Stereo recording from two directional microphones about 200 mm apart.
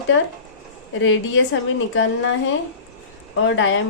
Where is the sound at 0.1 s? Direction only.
85° left.